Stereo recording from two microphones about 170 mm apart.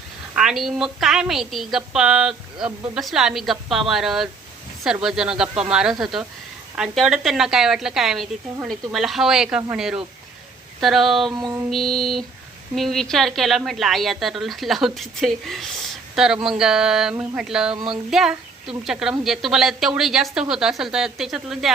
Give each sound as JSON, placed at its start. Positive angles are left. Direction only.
{"t": 0.3, "sound": "a woman's voice", "side_deg": -5}
{"t": 11.3, "sound": "mantra", "side_deg": -25}
{"t": 11.7, "sound": "a woman's voice", "side_deg": 0}
{"t": 17.7, "sound": "mantra", "side_deg": -25}
{"t": 18.1, "sound": "a woman's voice", "side_deg": -5}